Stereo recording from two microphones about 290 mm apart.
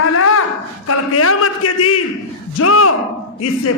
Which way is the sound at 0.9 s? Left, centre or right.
Left.